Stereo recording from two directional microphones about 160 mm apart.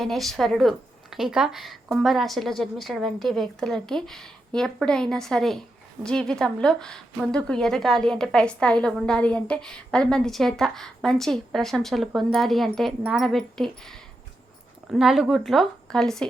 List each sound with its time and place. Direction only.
0.0 s a woman's voice: centre (ahead or behind)